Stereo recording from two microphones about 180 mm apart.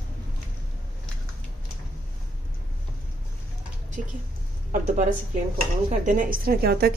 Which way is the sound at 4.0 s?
50° right (ahead or behind).